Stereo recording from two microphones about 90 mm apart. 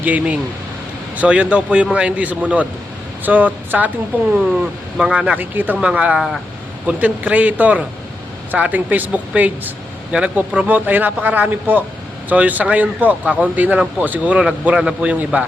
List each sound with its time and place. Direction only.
0.0 s speech: 15° right (ahead or behind)